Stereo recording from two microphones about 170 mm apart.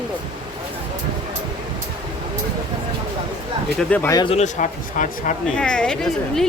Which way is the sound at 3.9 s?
15° left (ahead or behind).